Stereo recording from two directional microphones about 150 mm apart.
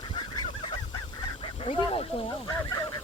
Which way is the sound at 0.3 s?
35° left (ahead or behind).